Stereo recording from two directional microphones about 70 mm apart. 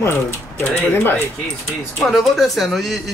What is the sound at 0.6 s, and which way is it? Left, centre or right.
Speech, left.